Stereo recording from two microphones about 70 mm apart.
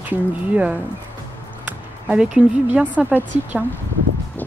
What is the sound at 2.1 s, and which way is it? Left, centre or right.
Speech, centre.